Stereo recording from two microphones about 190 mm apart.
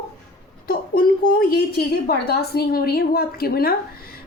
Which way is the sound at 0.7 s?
50° left (ahead or behind).